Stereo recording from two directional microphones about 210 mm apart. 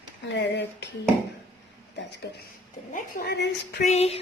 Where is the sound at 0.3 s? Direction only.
55° left (ahead or behind).